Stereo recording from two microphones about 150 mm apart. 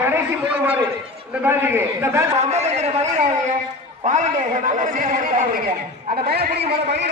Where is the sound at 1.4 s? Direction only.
15° right (ahead or behind).